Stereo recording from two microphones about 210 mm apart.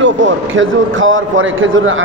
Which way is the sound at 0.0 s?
65° right (ahead or behind).